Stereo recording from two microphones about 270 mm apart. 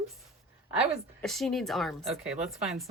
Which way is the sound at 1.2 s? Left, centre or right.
Centre.